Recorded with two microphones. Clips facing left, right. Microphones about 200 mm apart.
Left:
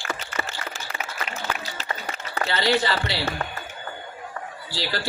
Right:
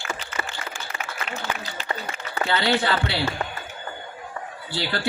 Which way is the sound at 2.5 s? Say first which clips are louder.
Even; 60° right (ahead or behind).